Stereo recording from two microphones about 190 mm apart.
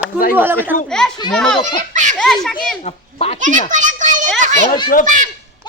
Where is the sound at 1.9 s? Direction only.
40° right (ahead or behind).